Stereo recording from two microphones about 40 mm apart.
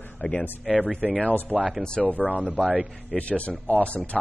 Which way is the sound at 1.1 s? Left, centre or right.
Left.